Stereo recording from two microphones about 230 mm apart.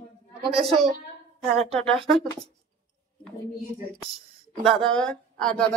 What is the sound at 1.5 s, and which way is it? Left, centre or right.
Speech, right.